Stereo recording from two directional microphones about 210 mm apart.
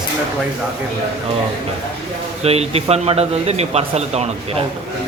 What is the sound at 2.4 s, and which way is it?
Speech, 30° right (ahead or behind).